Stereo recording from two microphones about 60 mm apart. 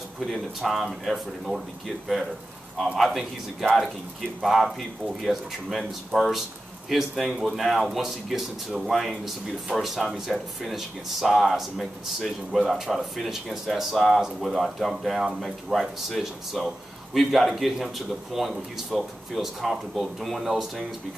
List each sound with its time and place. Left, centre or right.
0.2 s speech: centre
4.4 s speech: centre